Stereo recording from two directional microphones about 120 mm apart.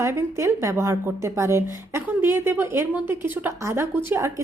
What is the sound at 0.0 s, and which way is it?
A woman's voice, 20° right (ahead or behind).